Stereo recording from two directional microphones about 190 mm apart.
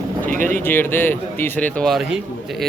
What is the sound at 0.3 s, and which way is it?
Speech, 45° right (ahead or behind).